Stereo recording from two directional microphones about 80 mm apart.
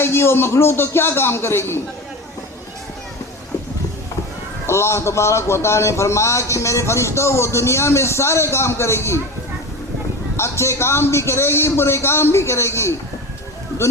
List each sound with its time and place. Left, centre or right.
0.0 s a man's voice: left
4.6 s a man's voice: left
10.3 s a man's voice: left